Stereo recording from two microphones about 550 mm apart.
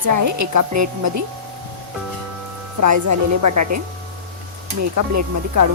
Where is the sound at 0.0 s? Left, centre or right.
Right.